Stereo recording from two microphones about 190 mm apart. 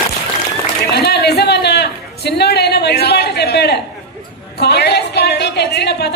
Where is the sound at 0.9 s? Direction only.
60° left (ahead or behind).